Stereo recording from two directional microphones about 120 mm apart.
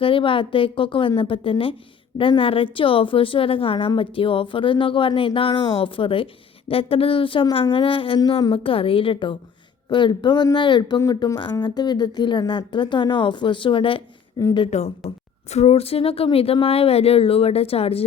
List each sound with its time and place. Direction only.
0.0 s a woman's voice: 45° left (ahead or behind)
14.7 s speech: 65° left (ahead or behind)